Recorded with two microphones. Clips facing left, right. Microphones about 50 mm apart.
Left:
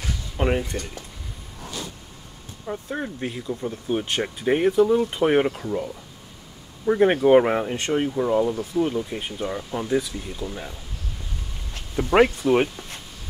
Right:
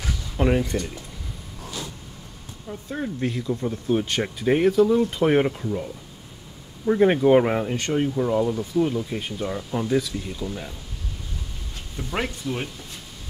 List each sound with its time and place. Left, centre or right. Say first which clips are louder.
0.0 s a sound: right 1 dB; centre
2.9 s speech: right 5 dB; centre
3.9 s speech: right 1 dB; centre
6.9 s speech: left 1 dB; centre
12.0 s speech: left 11 dB; left